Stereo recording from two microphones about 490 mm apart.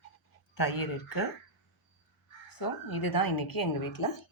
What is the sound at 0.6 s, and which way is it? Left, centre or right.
Speech, left.